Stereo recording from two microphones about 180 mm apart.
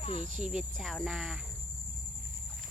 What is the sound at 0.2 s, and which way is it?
Speech, 40° right (ahead or behind).